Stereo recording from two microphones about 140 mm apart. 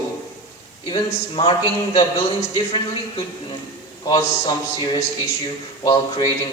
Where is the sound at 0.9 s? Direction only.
35° left (ahead or behind).